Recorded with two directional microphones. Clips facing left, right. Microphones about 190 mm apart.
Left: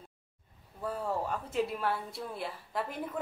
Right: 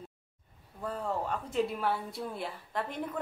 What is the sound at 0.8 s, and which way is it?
A woman's voice, 5° left (ahead or behind).